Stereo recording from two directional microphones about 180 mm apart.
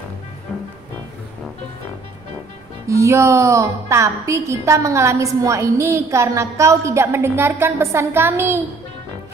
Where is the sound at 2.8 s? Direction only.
15° right (ahead or behind).